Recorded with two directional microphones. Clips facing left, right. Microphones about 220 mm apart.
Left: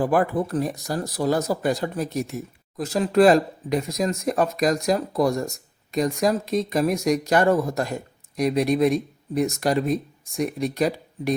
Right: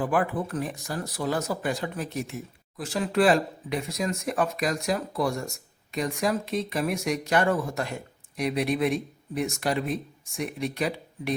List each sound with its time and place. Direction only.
0.0 s speech: 40° left (ahead or behind)